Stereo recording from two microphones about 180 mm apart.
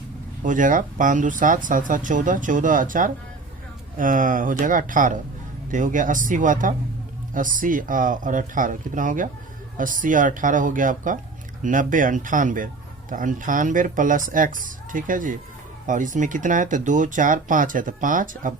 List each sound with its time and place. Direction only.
0.4 s speech: 45° right (ahead or behind)